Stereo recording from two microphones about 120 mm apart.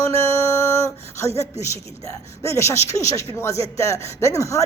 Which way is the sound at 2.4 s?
25° left (ahead or behind).